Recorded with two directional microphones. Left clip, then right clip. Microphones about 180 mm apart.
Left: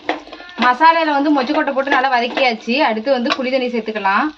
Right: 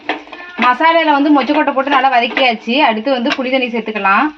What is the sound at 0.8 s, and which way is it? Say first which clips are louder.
A woman's voice: right 1 dB; 40° right (ahead or behind).